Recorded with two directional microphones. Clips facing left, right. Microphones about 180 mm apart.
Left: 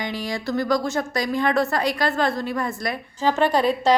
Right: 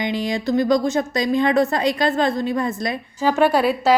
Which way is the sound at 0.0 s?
20° right (ahead or behind).